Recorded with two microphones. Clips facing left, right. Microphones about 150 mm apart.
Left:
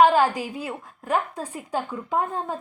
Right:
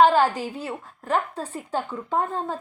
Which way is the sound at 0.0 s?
10° left (ahead or behind).